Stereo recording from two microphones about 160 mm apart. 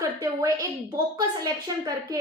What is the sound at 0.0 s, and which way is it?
A woman's voice, 20° right (ahead or behind).